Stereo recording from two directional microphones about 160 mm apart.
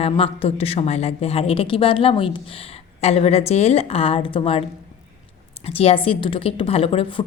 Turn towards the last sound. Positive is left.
turn(degrees=35)  # may be behind; listen again after turning